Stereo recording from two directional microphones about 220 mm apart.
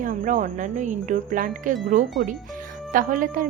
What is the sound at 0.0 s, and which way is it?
Speech, 35° right (ahead or behind).